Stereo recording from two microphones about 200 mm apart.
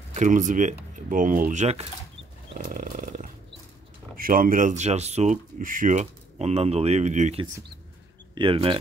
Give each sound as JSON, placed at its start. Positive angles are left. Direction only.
{"t": 0.1, "sound": "speech", "side_deg": -40}
{"t": 2.5, "sound": "a sound", "side_deg": -40}
{"t": 4.2, "sound": "speech", "side_deg": -45}